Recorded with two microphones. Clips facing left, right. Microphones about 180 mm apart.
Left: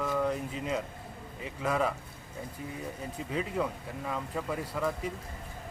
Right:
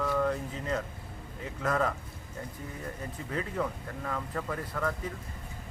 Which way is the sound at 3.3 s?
10° left (ahead or behind).